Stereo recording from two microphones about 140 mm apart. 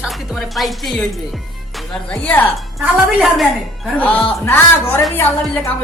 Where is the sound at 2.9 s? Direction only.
Centre (ahead or behind); by 5.7 s 15° left (ahead or behind).